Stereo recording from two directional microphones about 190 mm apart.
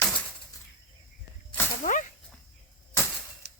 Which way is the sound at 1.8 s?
40° left (ahead or behind).